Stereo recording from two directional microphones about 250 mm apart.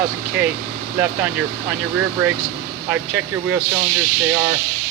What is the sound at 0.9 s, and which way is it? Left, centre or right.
Speech, centre.